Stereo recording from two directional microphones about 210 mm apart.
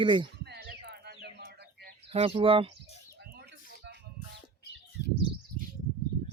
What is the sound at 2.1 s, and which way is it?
Speech, 25° right (ahead or behind).